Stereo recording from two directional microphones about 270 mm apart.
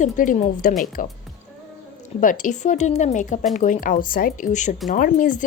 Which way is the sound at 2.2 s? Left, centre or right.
Left.